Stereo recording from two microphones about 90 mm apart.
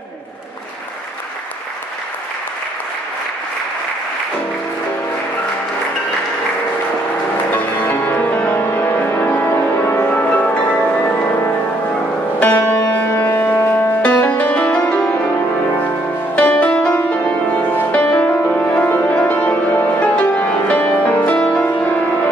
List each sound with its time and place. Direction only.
7.5 s music: 20° left (ahead or behind)
12.4 s music: 20° left (ahead or behind)
16.3 s music: 15° left (ahead or behind)